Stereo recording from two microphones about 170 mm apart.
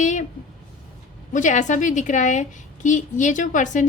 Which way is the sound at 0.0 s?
45° left (ahead or behind).